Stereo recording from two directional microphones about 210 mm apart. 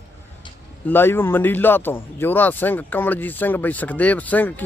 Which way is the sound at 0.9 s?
10° left (ahead or behind).